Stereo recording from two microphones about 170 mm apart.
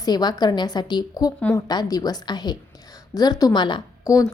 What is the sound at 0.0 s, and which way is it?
A woman's voice, 25° left (ahead or behind).